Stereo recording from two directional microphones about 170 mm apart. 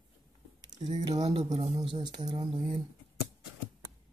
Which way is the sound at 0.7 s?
35° right (ahead or behind).